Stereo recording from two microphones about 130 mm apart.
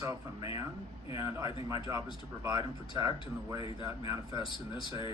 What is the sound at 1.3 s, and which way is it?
Speech, 25° right (ahead or behind).